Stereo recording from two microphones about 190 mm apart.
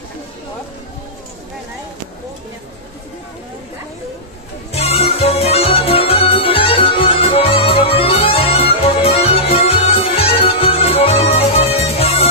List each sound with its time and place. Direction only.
4.7 s music: 30° left (ahead or behind)